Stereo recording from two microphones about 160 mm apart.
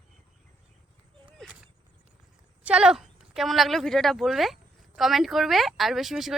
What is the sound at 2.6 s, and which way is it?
A woman's voice, 5° right (ahead or behind).